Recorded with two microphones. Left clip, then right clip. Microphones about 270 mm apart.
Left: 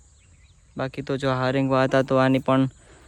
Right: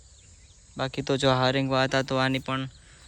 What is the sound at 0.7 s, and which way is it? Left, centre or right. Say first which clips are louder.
Speech: even; centre.